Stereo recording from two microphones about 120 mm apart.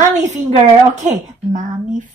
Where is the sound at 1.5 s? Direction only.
90° right.